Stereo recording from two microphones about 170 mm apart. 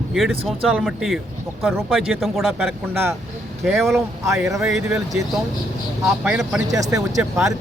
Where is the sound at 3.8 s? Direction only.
Centre (ahead or behind).